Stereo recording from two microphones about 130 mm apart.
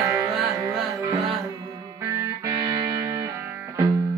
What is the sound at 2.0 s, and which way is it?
Music, 20° right (ahead or behind).